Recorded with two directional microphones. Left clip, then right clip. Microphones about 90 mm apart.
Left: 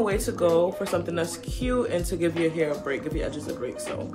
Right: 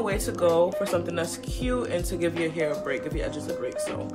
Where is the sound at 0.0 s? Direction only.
15° right (ahead or behind).